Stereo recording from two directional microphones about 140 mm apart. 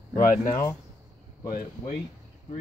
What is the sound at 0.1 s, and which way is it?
Speech, 65° left (ahead or behind).